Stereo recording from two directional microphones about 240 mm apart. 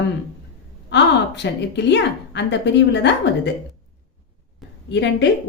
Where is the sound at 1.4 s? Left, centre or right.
Left.